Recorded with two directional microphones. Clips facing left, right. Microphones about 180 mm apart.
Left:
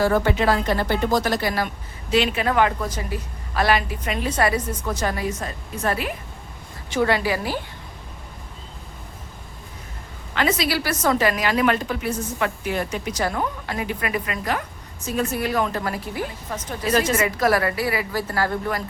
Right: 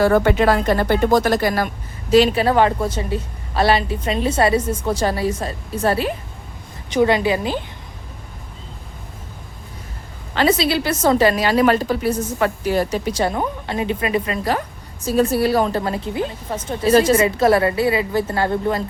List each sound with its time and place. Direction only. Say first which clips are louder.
0.0 s speech: right 5 dB; 60° right (ahead or behind); by 6.1 s 30° right (ahead or behind)
6.9 s a woman's voice: right 5 dB; 20° right (ahead or behind)
10.3 s a woman's voice: right 5 dB; 30° right (ahead or behind)